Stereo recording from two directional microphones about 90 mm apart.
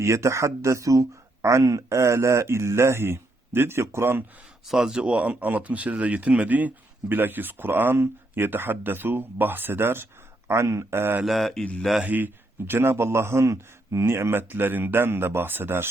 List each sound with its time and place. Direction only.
0.0 s speech: 30° right (ahead or behind)
4.6 s speech: 5° right (ahead or behind); by 11.2 s 25° right (ahead or behind)
11.2 s mantra: centre (ahead or behind)
12.0 s speech: 20° right (ahead or behind)